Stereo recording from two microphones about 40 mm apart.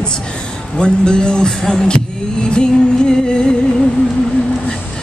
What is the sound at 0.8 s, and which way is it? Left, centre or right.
A woman's voice, left.